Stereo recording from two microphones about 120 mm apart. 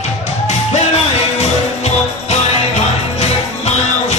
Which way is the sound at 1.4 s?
65° left (ahead or behind).